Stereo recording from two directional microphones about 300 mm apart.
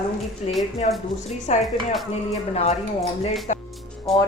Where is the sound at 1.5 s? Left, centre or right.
Left.